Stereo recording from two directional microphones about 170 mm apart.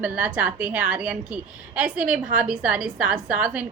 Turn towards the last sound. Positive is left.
turn(degrees=-5)  # may be behind; listen again after turning